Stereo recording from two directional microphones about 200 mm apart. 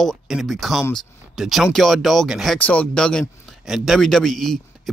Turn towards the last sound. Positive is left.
turn(degrees=0)  # may be behind; listen again after turning